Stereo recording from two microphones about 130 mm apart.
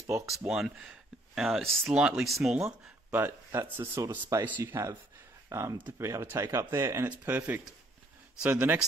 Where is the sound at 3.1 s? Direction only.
15° right (ahead or behind).